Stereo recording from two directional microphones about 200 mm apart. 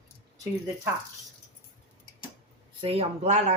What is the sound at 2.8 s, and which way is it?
Speech, 30° right (ahead or behind).